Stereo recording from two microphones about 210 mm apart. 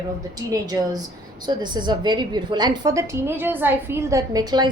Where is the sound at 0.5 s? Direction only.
15° right (ahead or behind).